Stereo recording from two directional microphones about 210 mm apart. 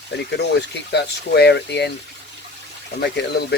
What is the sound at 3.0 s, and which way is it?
Speech, 50° left (ahead or behind).